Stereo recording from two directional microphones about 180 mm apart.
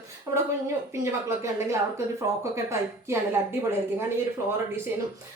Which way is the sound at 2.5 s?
15° right (ahead or behind).